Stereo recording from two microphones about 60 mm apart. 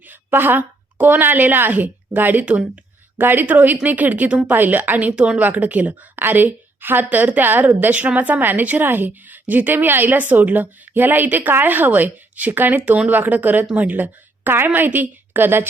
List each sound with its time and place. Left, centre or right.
0.1 s a woman's voice: right
3.2 s a woman's voice: right